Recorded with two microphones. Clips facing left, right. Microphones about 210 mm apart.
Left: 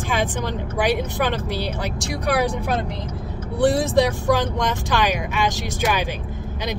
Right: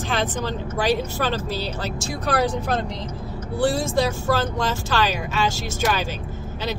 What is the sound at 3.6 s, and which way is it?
Speech, 20° left (ahead or behind).